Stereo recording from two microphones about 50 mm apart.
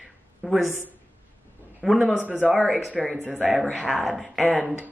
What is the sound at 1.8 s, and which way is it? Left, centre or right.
A woman's voice, centre.